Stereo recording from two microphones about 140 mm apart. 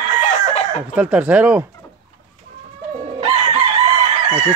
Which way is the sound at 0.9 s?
10° right (ahead or behind).